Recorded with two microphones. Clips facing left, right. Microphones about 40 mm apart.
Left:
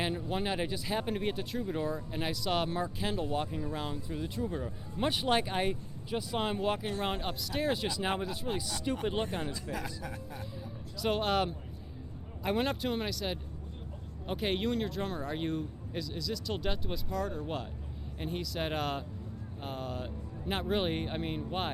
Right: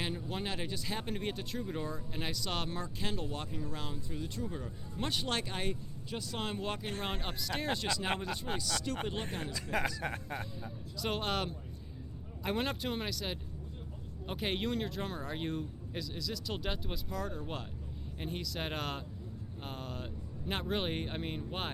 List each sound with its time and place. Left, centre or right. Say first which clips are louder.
0.0 s speech: left 4 dB; centre
8.9 s speech: left 6 dB; centre
9.3 s speech: left 4 dB; left
10.0 s speech: right 3 dB; right
10.9 s speech: left 5 dB; centre